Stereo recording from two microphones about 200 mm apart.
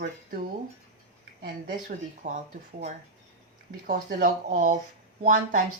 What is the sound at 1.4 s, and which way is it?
Speech, 40° right (ahead or behind).